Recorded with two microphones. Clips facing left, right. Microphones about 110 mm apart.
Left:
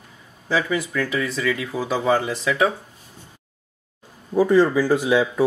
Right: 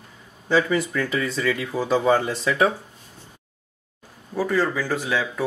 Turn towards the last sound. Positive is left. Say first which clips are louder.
# left 6 dB
turn(degrees=15)  # may be behind; listen again after turning